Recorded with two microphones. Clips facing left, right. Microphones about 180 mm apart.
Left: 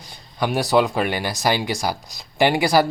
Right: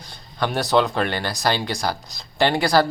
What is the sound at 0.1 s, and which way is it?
Speech, 10° left (ahead or behind).